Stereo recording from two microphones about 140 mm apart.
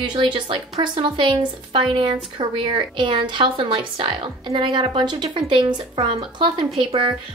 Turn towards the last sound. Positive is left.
turn(degrees=-35)  # may be behind; listen again after turning